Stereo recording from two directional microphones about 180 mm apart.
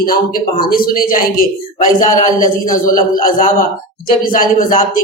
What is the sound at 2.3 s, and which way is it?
A man's voice, 50° left (ahead or behind).